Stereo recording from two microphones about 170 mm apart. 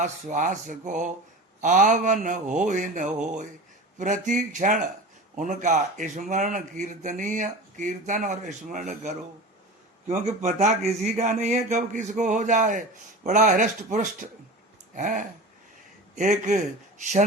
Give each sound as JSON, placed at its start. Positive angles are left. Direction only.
{"t": 0.0, "sound": "speech", "side_deg": -45}